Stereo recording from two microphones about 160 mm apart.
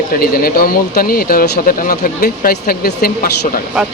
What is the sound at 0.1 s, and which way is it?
Speech, 65° left (ahead or behind).